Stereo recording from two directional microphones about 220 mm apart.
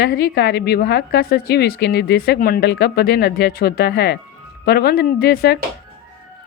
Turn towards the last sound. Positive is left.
turn(degrees=45)  # may be behind; listen again after turning